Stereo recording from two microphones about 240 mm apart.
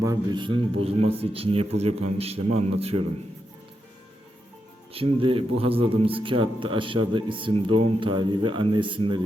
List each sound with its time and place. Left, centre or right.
0.0 s a man's voice: centre
4.9 s a man's voice: right